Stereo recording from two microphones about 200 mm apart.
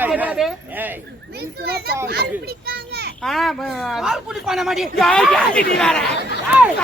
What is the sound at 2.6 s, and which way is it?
Children playing, 50° right (ahead or behind).